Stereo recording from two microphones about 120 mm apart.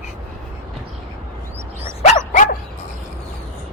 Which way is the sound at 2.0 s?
80° left.